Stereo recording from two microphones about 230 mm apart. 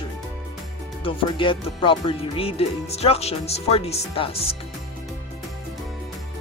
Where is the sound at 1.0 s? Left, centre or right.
Left.